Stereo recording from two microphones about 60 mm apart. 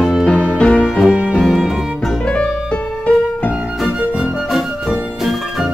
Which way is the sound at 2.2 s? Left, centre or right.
Centre.